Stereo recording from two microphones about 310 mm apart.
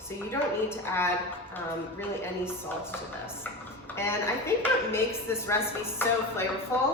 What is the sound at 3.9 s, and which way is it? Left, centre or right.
A woman's voice, centre.